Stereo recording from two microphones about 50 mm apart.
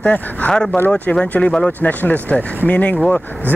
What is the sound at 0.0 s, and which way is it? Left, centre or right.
Speech, left.